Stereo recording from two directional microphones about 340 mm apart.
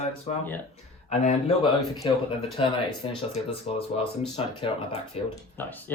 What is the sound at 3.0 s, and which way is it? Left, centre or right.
Speech, centre.